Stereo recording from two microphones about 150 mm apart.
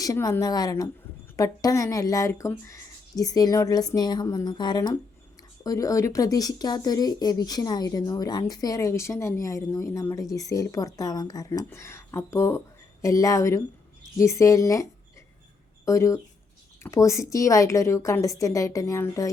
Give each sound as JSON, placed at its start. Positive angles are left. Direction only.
{"t": 0.0, "sound": "speech", "side_deg": 25}
{"t": 15.9, "sound": "speech", "side_deg": 20}